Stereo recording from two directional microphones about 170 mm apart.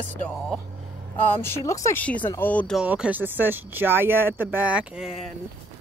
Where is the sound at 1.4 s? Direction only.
15° left (ahead or behind).